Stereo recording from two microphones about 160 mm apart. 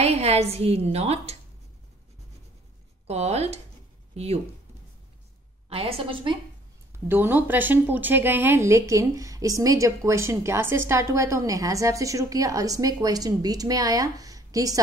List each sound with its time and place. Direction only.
0.0 s a woman's voice: 40° right (ahead or behind)
3.1 s a woman's voice: 40° right (ahead or behind)
5.7 s a woman's voice: 35° right (ahead or behind)
7.1 s a woman's voice: 10° right (ahead or behind)